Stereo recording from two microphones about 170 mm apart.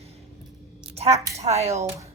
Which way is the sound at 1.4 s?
40° right (ahead or behind).